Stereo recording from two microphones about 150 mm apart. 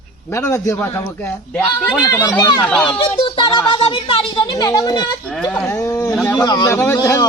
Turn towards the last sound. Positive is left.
turn(degrees=20)  # may be behind; listen again after turning